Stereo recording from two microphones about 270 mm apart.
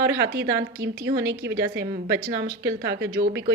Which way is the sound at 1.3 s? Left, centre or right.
Right.